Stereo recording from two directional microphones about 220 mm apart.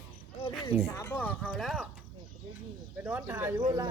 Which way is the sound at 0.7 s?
10° left (ahead or behind).